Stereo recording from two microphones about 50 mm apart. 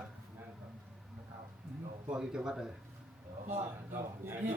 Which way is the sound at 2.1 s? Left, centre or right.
Centre.